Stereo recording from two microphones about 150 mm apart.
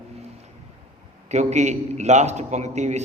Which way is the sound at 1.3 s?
50° right (ahead or behind).